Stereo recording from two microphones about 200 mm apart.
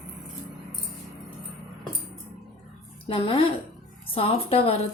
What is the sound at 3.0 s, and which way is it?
A woman's voice, 25° left (ahead or behind).